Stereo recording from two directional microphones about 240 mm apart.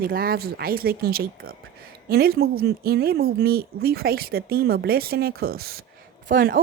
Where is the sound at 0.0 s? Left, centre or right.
Right.